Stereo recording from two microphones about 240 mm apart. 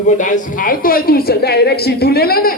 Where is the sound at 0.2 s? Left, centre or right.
Left.